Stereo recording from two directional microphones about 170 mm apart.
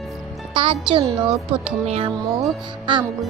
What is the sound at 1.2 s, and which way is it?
Speech, 35° right (ahead or behind).